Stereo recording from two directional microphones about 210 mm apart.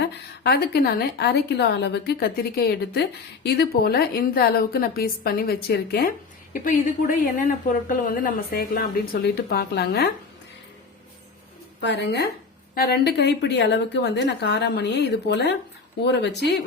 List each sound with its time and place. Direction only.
0.0 s a woman's voice: 50° left (ahead or behind)
11.8 s a woman's voice: 55° left (ahead or behind)